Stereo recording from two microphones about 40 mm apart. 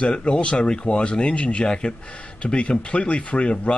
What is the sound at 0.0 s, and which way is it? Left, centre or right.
Speech, left.